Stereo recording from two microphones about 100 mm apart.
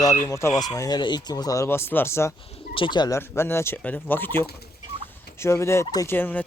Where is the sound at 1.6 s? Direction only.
25° left (ahead or behind).